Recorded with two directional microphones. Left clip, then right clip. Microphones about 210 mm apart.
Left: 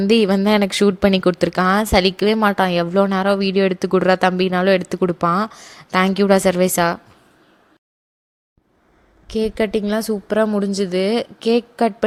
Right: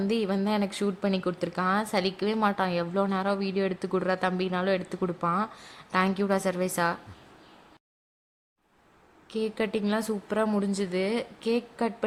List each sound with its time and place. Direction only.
0.0 s speech: 40° left (ahead or behind)
9.3 s speech: 30° left (ahead or behind)